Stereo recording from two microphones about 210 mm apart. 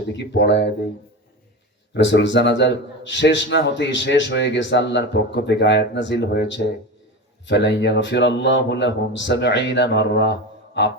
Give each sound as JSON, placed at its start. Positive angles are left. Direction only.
{"t": 0.3, "sound": "a man's voice", "side_deg": 55}
{"t": 1.9, "sound": "a man's voice", "side_deg": 60}
{"t": 10.8, "sound": "music", "side_deg": 55}